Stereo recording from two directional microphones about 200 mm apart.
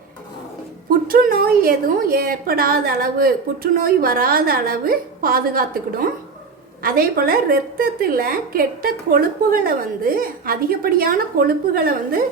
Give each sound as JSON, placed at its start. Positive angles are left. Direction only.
{"t": 1.0, "sound": "a woman's voice", "side_deg": -50}